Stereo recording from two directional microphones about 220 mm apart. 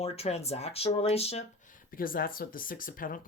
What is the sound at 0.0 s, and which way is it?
Speech, 30° left (ahead or behind).